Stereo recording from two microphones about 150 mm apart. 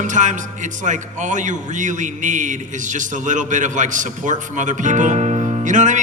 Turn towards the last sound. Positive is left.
turn(degrees=-55)  # may be behind; listen again after turning